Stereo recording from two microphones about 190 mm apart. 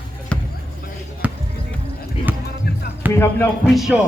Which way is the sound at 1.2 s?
10° right (ahead or behind).